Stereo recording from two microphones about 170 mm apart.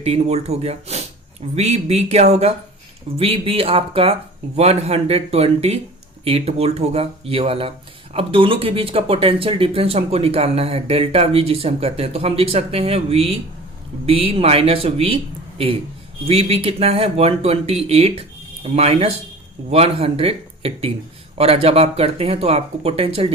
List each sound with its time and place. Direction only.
0.0 s speech: 40° right (ahead or behind)